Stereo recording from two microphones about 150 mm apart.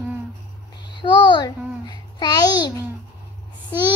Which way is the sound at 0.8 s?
30° left (ahead or behind).